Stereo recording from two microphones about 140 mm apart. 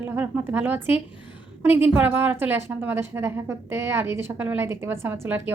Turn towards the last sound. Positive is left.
turn(degrees=-15)  # may be behind; listen again after turning